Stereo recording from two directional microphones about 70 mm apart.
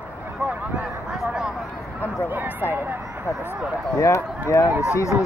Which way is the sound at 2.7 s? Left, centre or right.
Right.